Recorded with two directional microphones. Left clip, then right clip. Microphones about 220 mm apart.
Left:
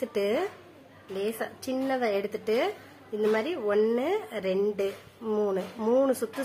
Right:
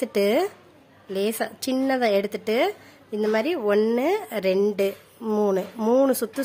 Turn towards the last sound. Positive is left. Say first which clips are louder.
# right 4 dB
turn(degrees=-40)  # may be behind; listen again after turning